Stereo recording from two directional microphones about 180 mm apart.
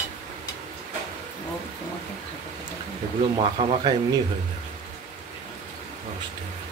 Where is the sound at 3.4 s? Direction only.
35° right (ahead or behind).